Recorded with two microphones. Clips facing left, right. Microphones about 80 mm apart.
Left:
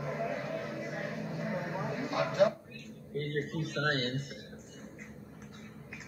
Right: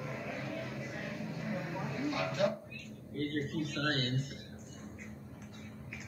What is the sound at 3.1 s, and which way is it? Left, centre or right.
Speech, left.